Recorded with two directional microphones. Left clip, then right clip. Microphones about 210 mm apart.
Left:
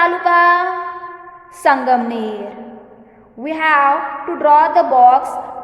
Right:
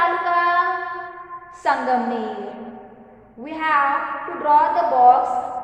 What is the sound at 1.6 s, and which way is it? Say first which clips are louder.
Speech: left 6 dB; 55° left (ahead or behind).